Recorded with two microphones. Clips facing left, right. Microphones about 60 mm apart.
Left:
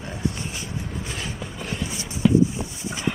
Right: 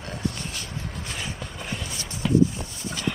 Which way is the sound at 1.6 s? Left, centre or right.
Centre.